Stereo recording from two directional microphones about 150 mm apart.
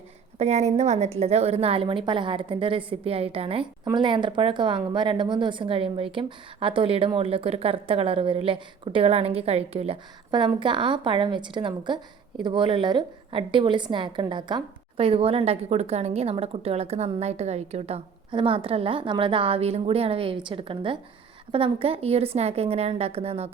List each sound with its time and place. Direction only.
0.3 s a woman's voice: 50° right (ahead or behind)